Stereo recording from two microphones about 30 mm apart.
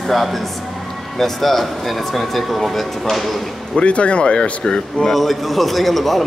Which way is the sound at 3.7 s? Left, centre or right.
Left.